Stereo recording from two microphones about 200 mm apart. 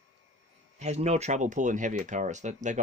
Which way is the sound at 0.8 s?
35° right (ahead or behind).